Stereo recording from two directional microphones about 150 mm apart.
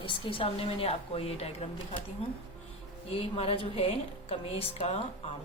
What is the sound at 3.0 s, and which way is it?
A woman's voice, 40° left (ahead or behind).